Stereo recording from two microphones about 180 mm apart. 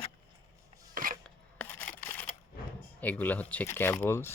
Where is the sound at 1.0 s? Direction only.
50° right (ahead or behind).